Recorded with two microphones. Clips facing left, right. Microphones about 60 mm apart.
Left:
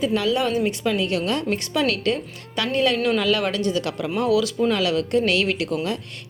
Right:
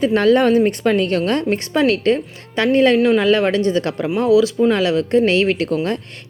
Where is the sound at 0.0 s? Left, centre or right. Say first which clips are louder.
Right 8 dB; right.